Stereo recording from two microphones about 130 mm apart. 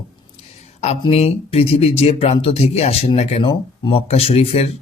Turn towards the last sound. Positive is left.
turn(degrees=50)  # may be behind; listen again after turning